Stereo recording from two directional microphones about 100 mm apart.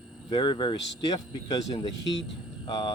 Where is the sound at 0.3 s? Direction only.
50° left (ahead or behind).